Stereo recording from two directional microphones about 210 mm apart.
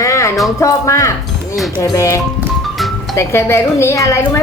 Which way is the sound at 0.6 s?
15° left (ahead or behind).